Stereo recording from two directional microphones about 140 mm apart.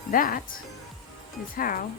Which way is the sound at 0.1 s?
85° left.